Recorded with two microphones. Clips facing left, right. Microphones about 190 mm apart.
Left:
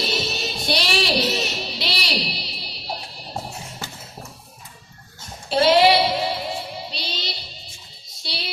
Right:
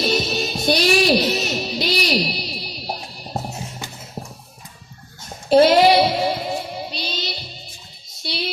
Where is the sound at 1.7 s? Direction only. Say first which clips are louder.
Right 7 dB; 45° right (ahead or behind).